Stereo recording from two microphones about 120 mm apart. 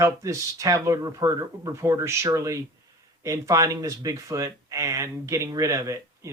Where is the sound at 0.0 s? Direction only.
25° right (ahead or behind).